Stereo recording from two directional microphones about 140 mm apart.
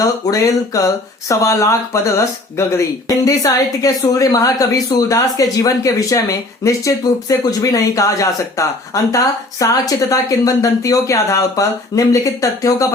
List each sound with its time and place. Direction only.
0.0 s a woman's voice: 25° left (ahead or behind)